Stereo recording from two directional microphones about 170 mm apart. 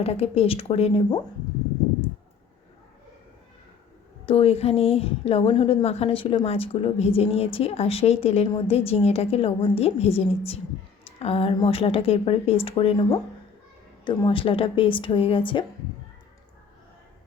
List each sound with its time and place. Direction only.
0.0 s a woman's voice: 35° left (ahead or behind)
4.3 s a woman's voice: 35° left (ahead or behind)